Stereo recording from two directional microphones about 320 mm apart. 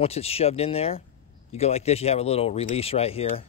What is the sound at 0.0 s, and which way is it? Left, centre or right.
Speech, centre.